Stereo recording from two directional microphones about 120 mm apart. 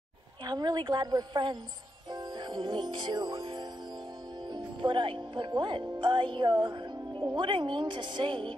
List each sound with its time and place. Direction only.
0.5 s a woman's voice: 35° right (ahead or behind)
2.1 s music: 35° right (ahead or behind)
4.5 s a woman's voice: 40° right (ahead or behind)